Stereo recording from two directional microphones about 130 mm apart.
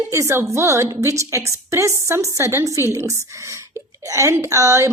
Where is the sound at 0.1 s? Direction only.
20° right (ahead or behind).